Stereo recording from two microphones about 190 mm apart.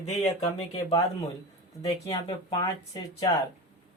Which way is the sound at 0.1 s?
30° left (ahead or behind).